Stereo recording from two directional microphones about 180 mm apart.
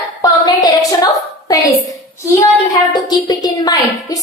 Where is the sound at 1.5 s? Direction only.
20° left (ahead or behind).